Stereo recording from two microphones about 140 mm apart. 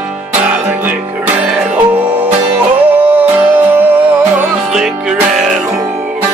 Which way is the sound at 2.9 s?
15° right (ahead or behind).